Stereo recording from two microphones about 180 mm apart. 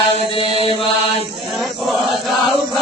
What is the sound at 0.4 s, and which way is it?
Chant, 30° right (ahead or behind).